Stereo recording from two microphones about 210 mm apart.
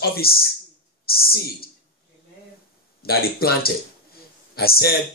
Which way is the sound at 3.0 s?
45° left (ahead or behind).